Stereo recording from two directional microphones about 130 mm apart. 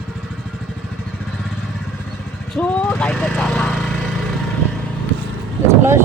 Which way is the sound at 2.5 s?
10° left (ahead or behind).